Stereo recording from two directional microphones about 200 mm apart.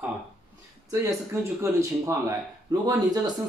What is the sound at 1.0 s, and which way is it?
Speech, 15° right (ahead or behind).